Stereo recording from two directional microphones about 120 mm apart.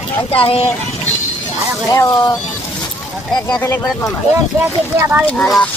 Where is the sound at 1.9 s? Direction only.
35° left (ahead or behind).